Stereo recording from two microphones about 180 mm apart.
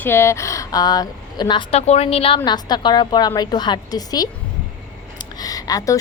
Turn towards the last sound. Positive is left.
turn(degrees=20)  # may be behind; listen again after turning